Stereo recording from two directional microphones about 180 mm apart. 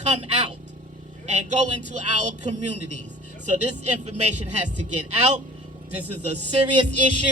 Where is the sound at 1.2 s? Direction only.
40° right (ahead or behind).